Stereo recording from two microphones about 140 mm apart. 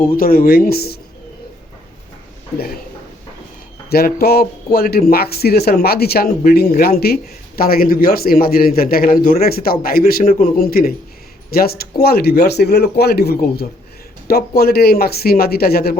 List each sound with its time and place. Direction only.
0.2 s speech: 90° left
3.9 s speech: 90° left